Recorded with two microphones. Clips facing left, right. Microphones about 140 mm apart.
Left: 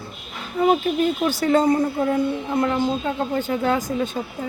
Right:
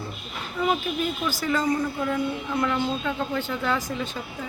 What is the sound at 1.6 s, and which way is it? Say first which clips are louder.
Speech: left 6 dB; 30° left (ahead or behind).